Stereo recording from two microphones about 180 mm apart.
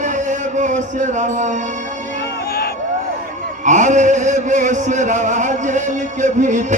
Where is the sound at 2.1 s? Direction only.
65° left (ahead or behind).